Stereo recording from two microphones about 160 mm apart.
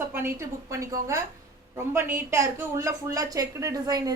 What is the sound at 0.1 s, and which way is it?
A woman's voice, 15° right (ahead or behind).